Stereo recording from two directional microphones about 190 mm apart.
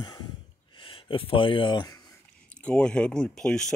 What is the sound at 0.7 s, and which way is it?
Speech, 25° left (ahead or behind).